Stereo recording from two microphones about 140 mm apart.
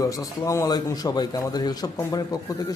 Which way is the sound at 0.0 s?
25° left (ahead or behind).